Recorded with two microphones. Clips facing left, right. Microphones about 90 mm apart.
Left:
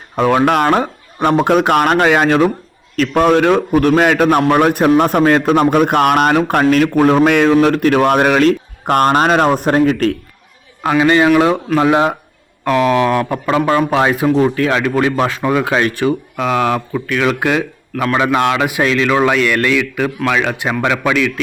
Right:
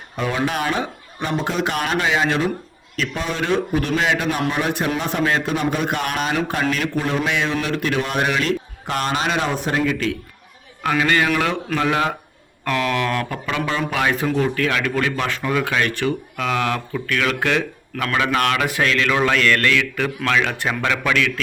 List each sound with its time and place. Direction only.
0.2 s speech: 60° left (ahead or behind)
10.8 s speech: 25° left (ahead or behind); by 13.8 s 40° left (ahead or behind)
14.1 s a man's voice: 15° left (ahead or behind)